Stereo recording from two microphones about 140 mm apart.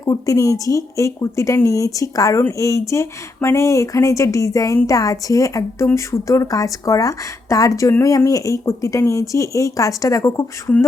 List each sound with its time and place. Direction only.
0.0 s speech: 25° left (ahead or behind)